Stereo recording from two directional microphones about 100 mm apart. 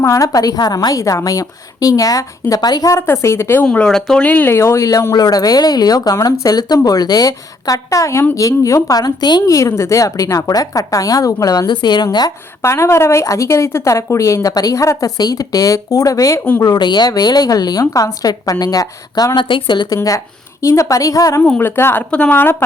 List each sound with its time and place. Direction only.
0.0 s speech: 35° left (ahead or behind)
3.1 s speech: 25° left (ahead or behind)
3.7 s speech: 10° left (ahead or behind)
4.5 s speech: 30° left (ahead or behind)
9.5 s speech: 30° left (ahead or behind)
12.6 s speech: 25° left (ahead or behind); by 20.0 s 50° left (ahead or behind)
20.0 s speech: 30° left (ahead or behind)
21.6 s speech: 25° left (ahead or behind)